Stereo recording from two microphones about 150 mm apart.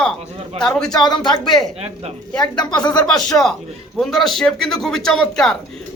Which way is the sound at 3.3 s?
5° left (ahead or behind).